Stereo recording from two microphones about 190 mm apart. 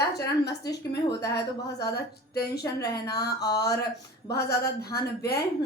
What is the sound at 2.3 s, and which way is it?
Speech, 55° left (ahead or behind).